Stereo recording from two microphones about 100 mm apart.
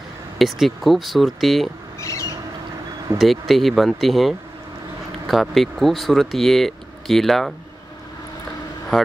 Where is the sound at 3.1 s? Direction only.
Centre (ahead or behind).